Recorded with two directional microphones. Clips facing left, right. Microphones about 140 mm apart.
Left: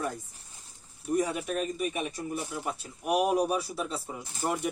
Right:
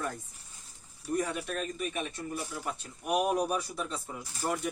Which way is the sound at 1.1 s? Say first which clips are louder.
Left 4 dB; 10° left (ahead or behind).